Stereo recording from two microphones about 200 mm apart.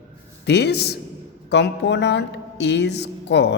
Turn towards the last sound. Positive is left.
turn(degrees=60)  # may be behind; listen again after turning